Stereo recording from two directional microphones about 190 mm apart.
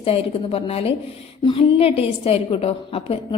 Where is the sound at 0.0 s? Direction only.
30° left (ahead or behind).